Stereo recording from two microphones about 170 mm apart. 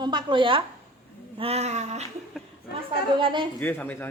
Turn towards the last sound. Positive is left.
turn(degrees=10)  # may be behind; listen again after turning